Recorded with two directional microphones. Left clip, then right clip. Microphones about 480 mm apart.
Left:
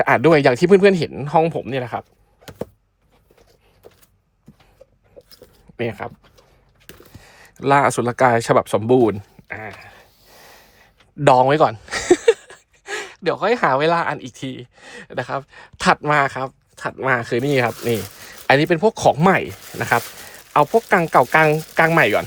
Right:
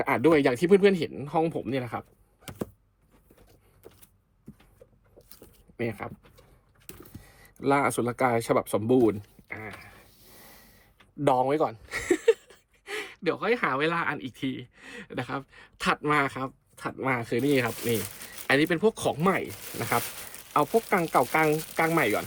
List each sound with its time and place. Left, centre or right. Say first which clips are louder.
0.0 s speech: left 9 dB; centre
5.7 s speech: left 8 dB; centre
7.1 s a sound: left 8 dB; centre
7.6 s speech: left 9 dB; centre
20.5 s speech: left 9 dB; centre